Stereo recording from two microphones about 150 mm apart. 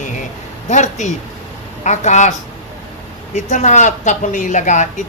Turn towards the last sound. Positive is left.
turn(degrees=55)  # may be behind; listen again after turning